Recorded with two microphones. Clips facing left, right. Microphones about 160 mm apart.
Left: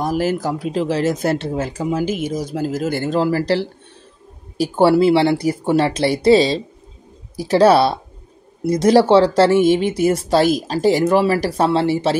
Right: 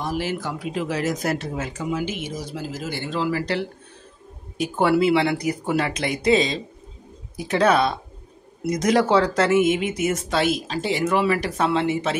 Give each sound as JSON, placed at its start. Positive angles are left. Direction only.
{"t": 0.0, "sound": "speech", "side_deg": 45}